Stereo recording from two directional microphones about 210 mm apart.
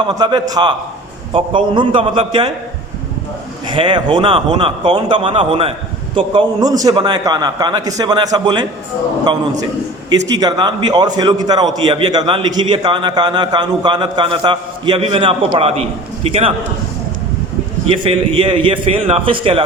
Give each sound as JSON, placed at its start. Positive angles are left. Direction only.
{"t": 0.0, "sound": "a man's voice", "side_deg": -20}
{"t": 3.8, "sound": "a man's voice", "side_deg": -20}
{"t": 18.0, "sound": "a man's voice", "side_deg": -25}